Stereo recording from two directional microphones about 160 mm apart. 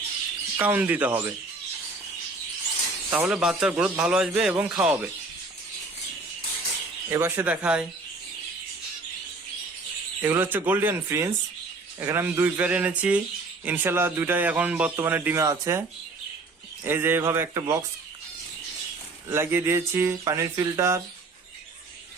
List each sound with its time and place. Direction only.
0.5 s a man's voice: 10° right (ahead or behind)
3.1 s a man's voice: 5° right (ahead or behind)
7.1 s a man's voice: 15° right (ahead or behind)
10.2 s a man's voice: 15° right (ahead or behind)
16.8 s a man's voice: 15° right (ahead or behind)
19.3 s a man's voice: 15° right (ahead or behind)